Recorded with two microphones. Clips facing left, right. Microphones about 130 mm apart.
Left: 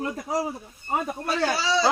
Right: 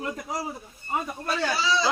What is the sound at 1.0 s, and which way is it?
Speech, 35° left (ahead or behind).